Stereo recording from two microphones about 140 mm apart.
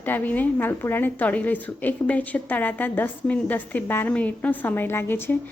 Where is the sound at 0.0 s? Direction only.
10° left (ahead or behind).